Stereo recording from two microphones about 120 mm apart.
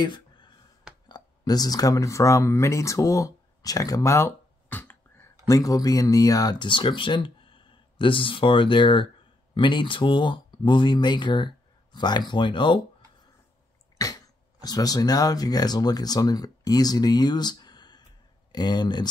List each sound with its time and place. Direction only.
0.0 s a sound: 40° left (ahead or behind)
1.0 s speech: 35° left (ahead or behind)
13.9 s speech: 30° left (ahead or behind)